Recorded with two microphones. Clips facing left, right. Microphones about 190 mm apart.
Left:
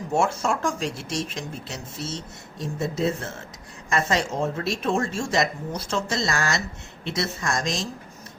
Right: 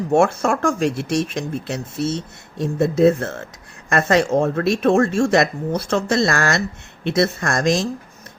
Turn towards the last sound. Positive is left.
turn(degrees=-60)  # may be behind; listen again after turning